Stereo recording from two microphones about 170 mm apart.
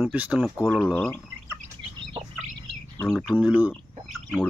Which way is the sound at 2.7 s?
Centre (ahead or behind).